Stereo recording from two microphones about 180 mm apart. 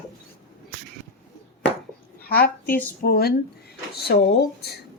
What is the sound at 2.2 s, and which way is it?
A woman's voice, 60° left (ahead or behind).